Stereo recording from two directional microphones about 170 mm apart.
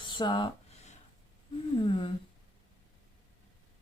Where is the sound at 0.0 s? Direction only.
25° left (ahead or behind).